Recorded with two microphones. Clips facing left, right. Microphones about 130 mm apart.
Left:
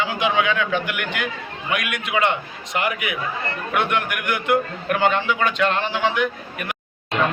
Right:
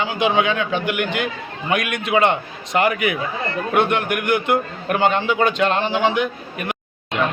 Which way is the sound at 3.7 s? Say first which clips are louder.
Right 4 dB; 30° right (ahead or behind).